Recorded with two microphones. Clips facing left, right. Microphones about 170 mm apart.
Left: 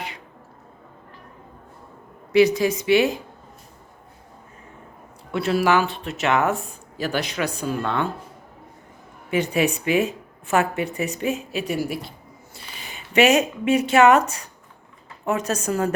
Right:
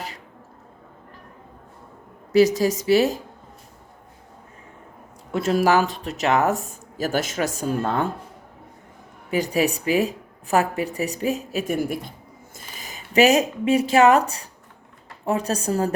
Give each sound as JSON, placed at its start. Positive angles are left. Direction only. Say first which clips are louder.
{"t": 2.3, "sound": "speech", "louder": "even", "side_deg": -40}
{"t": 5.3, "sound": "speech", "louder": "right 1 dB", "side_deg": -40}
{"t": 9.3, "sound": "speech", "louder": "even", "side_deg": -35}